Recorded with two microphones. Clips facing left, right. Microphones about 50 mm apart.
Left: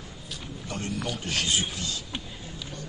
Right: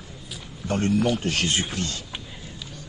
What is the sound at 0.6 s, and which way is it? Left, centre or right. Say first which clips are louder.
A man's voice: right 11 dB; right.